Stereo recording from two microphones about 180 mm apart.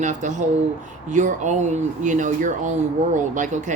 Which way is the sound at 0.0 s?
40° right (ahead or behind).